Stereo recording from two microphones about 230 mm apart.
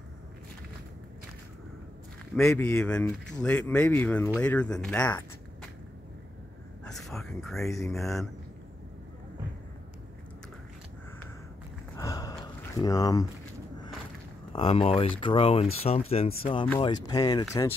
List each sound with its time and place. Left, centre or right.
2.3 s speech: centre
6.8 s a sound: centre
7.8 s speech: centre
12.0 s gasp: centre
14.5 s speech: left